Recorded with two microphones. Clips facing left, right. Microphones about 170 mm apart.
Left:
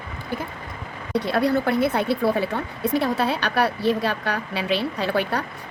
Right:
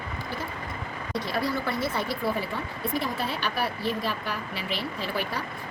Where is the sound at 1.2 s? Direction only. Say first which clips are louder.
Left 8 dB; 65° left (ahead or behind).